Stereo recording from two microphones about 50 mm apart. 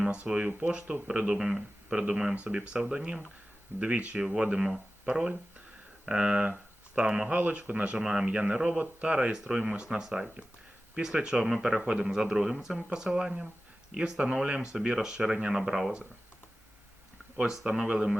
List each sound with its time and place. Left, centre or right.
0.0 s speech: right
2.3 s speech: right
2.7 s speech: centre
3.8 s speech: right
7.3 s speech: right; by 15.9 s centre
17.4 s speech: centre